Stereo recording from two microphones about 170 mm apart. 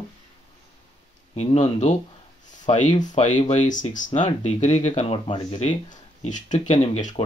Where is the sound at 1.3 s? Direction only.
40° left (ahead or behind).